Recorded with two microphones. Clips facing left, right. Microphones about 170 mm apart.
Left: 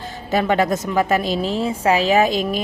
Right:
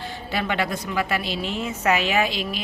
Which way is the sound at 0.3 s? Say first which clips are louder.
Left 8 dB; 40° left (ahead or behind).